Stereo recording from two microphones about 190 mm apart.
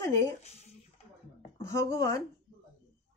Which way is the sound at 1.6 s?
15° left (ahead or behind).